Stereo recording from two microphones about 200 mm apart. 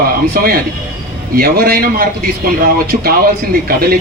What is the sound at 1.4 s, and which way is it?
Speech, 50° right (ahead or behind).